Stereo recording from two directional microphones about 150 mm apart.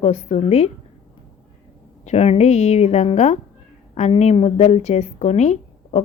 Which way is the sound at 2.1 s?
45° left (ahead or behind).